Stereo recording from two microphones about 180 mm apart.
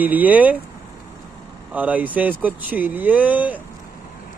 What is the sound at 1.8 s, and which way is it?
Speech, 10° right (ahead or behind).